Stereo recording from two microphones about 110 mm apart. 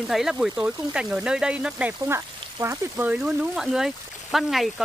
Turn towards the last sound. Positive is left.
turn(degrees=0)  # may be behind; listen again after turning